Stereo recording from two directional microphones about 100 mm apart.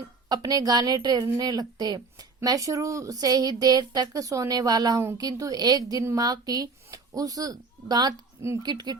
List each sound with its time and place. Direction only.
0.3 s a woman's voice: 40° right (ahead or behind)